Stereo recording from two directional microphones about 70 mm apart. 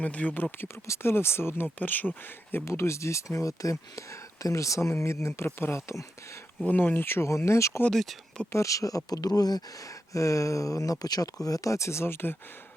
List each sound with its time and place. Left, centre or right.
0.0 s speech: left
0.9 s speech: left
2.6 s speech: left
6.7 s speech: left
9.0 s speech: left
10.1 s speech: left